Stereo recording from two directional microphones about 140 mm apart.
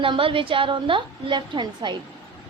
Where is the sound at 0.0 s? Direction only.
40° right (ahead or behind).